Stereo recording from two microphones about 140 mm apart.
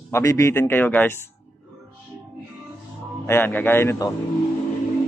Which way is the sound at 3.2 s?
15° left (ahead or behind).